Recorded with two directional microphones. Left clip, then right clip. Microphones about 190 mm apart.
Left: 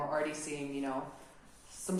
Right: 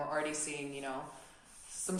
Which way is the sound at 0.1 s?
35° right (ahead or behind).